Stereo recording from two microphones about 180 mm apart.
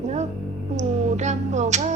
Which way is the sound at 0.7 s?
40° right (ahead or behind).